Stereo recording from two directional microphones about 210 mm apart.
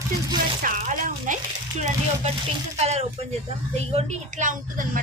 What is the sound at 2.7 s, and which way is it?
A woman's voice, 30° right (ahead or behind).